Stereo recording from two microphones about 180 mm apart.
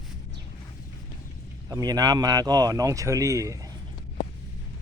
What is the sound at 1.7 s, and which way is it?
Speech, 20° right (ahead or behind).